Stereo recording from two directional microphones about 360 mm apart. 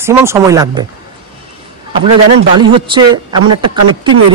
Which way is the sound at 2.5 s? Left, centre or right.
Centre.